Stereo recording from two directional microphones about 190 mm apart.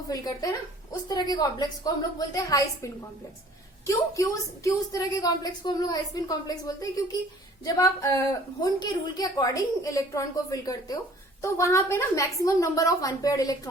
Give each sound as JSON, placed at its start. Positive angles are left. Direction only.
{"t": 0.1, "sound": "a woman's voice", "side_deg": 20}